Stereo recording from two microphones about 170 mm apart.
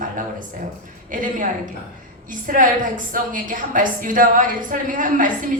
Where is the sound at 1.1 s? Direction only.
50° right (ahead or behind).